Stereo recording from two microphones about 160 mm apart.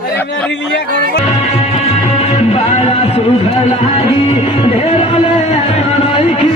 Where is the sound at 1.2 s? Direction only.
40° left (ahead or behind).